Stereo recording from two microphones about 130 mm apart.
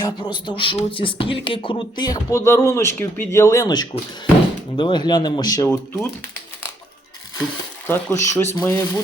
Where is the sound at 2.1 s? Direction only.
20° left (ahead or behind).